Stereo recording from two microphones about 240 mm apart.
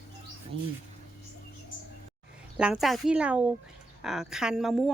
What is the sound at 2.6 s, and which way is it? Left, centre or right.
A woman's voice, centre.